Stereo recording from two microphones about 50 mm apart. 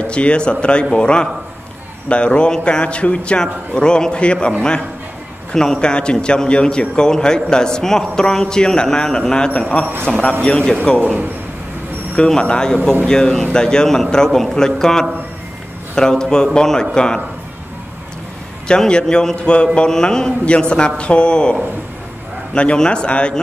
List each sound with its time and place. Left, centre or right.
0.0 s a man's voice: left
12.4 s a man's voice: centre
18.7 s a man's voice: centre